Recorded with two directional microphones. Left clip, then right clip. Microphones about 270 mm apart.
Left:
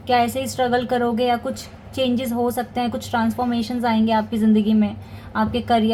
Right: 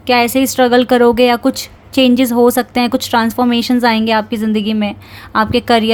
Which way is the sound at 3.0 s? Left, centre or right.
Right.